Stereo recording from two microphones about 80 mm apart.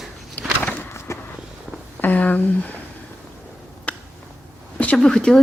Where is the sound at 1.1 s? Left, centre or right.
Left.